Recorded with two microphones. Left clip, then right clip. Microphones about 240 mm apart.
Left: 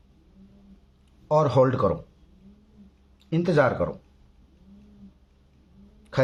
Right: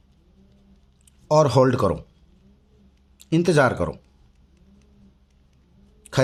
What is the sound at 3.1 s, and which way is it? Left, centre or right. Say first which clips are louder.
Speech: right 3 dB; right.